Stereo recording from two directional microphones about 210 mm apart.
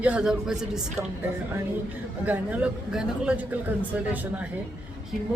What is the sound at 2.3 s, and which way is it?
Speech, 5° right (ahead or behind).